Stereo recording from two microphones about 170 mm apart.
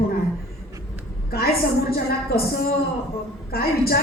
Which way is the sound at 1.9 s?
65° left (ahead or behind).